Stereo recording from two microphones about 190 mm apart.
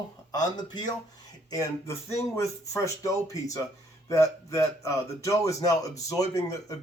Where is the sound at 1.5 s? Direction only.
15° left (ahead or behind).